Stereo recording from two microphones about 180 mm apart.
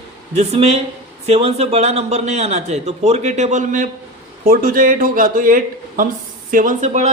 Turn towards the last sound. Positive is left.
turn(degrees=-40)  # may be behind; listen again after turning